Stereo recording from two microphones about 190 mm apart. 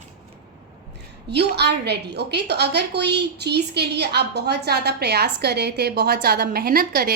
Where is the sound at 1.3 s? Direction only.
60° right (ahead or behind).